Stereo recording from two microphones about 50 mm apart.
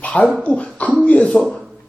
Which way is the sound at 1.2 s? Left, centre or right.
Centre.